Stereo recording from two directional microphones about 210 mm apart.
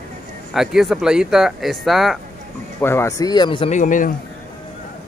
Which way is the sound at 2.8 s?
10° left (ahead or behind).